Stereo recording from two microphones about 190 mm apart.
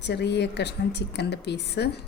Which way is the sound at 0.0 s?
65° left (ahead or behind).